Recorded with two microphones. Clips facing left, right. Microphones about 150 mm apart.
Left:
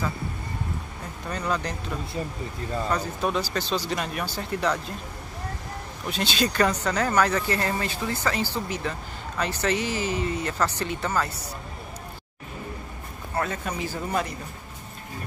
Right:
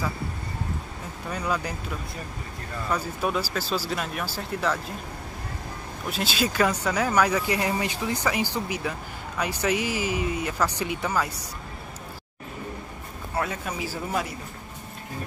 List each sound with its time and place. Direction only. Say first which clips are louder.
1.3 s speech: even; 10° right (ahead or behind)
2.9 s speech: right 1 dB; 5° right (ahead or behind)
6.0 s speech: left 1 dB; 5° right (ahead or behind)
13.3 s speech: left 1 dB; 5° right (ahead or behind)